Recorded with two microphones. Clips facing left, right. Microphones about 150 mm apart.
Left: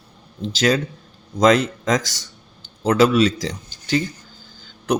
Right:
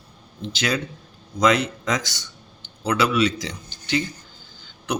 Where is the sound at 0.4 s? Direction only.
40° left (ahead or behind).